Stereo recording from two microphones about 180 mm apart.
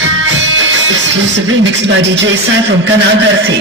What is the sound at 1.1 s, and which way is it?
A woman's voice, 90° right.